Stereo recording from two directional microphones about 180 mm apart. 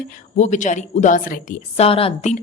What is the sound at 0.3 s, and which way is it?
A woman's voice, 40° left (ahead or behind).